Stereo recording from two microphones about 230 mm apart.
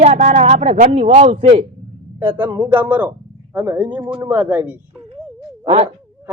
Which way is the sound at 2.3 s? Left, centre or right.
Centre.